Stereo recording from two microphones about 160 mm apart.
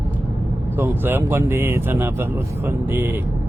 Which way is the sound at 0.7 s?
15° right (ahead or behind).